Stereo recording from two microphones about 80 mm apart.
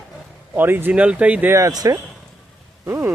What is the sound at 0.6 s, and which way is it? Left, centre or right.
Speech, right.